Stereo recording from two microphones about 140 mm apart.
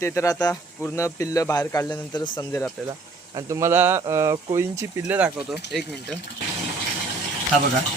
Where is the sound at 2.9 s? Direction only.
25° right (ahead or behind).